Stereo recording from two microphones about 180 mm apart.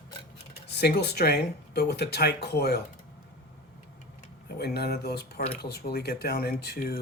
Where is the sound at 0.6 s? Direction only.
65° left (ahead or behind).